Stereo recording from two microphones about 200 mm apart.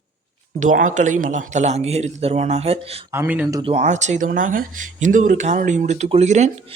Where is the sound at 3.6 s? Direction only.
30° right (ahead or behind).